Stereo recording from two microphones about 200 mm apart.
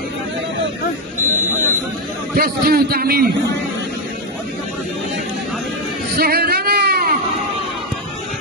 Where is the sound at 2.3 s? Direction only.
50° right (ahead or behind).